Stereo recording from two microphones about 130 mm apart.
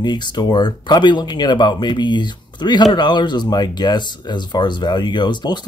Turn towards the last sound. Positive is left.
turn(degrees=35)  # may be behind; listen again after turning